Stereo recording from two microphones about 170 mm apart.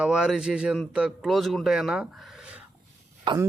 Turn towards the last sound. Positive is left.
turn(degrees=-30)  # may be behind; listen again after turning